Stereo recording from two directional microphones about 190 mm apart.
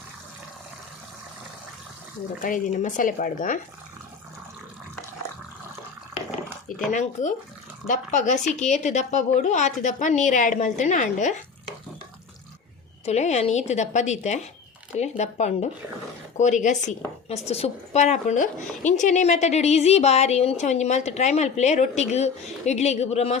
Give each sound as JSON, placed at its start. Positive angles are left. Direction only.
{"t": 2.4, "sound": "speech", "side_deg": 45}
{"t": 6.7, "sound": "speech", "side_deg": 40}
{"t": 13.1, "sound": "speech", "side_deg": 35}